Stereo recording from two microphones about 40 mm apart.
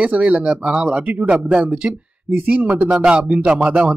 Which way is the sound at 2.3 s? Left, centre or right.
Right.